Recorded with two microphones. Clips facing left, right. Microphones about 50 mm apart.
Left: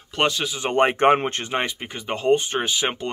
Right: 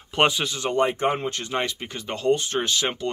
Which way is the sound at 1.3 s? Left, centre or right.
Left.